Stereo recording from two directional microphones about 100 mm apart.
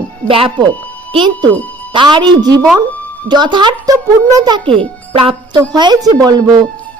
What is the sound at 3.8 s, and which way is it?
A child's voice, 35° right (ahead or behind).